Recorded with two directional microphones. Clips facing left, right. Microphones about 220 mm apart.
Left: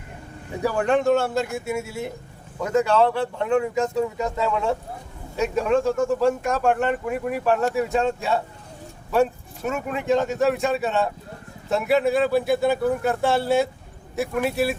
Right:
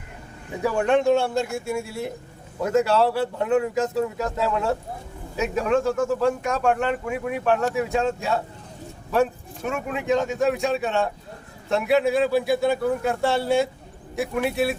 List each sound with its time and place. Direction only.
0.6 s speech: centre (ahead or behind)